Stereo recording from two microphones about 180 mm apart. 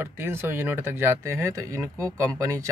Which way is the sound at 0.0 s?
10° right (ahead or behind).